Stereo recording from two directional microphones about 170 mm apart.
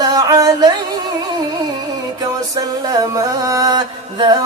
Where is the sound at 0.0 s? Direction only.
20° right (ahead or behind).